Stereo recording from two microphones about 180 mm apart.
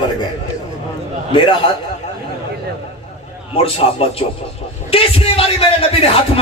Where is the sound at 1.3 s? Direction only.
25° left (ahead or behind).